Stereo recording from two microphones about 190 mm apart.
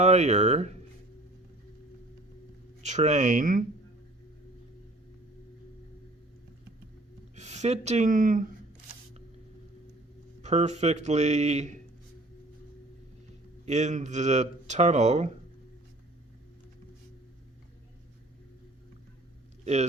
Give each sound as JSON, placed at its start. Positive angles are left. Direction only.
{"t": 0.0, "sound": "speech", "side_deg": -35}
{"t": 2.8, "sound": "speech", "side_deg": -40}
{"t": 7.3, "sound": "speech", "side_deg": -35}
{"t": 10.4, "sound": "speech", "side_deg": -35}
{"t": 13.7, "sound": "speech", "side_deg": -35}
{"t": 19.6, "sound": "speech", "side_deg": -35}